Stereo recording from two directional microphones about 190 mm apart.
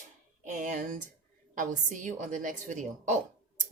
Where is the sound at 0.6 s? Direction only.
45° right (ahead or behind).